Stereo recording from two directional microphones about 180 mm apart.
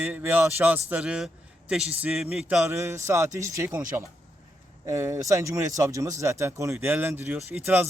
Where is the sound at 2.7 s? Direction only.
15° right (ahead or behind).